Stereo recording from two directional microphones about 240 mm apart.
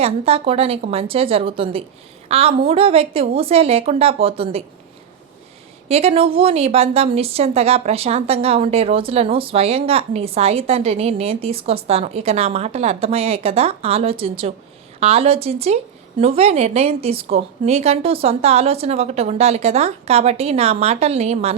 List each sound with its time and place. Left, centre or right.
0.0 s a woman's voice: right
5.9 s a woman's voice: right